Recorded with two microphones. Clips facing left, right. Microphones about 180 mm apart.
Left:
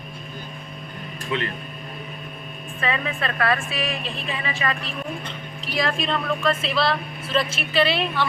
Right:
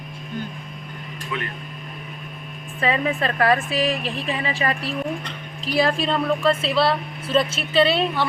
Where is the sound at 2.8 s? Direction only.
35° right (ahead or behind).